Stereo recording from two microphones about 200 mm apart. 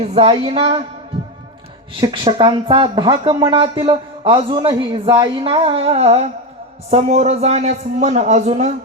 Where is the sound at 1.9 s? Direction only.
25° right (ahead or behind).